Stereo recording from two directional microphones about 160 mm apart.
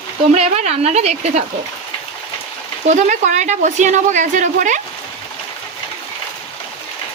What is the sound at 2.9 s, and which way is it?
A woman's voice, 50° right (ahead or behind).